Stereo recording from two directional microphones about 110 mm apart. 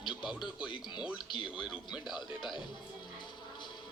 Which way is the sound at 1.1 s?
45° left (ahead or behind).